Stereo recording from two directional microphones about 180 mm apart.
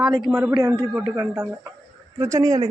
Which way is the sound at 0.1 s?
15° right (ahead or behind).